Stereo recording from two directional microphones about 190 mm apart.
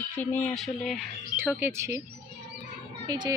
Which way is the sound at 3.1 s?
20° right (ahead or behind).